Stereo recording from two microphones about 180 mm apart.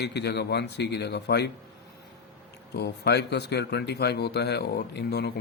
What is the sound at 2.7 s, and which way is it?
A man's voice, 65° left (ahead or behind).